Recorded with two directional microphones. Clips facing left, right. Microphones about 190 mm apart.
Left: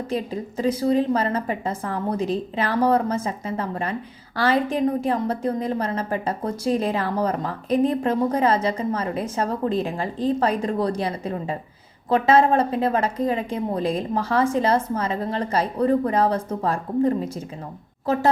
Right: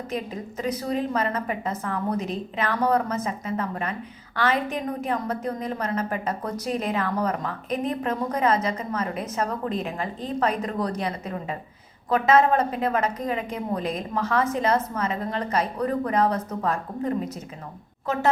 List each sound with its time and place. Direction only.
0.1 s a woman's voice: 30° left (ahead or behind)